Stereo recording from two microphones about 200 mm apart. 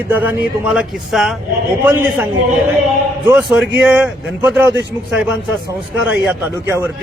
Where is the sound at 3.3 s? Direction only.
Centre (ahead or behind).